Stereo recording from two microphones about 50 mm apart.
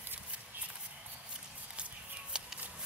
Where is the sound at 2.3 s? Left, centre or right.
Centre.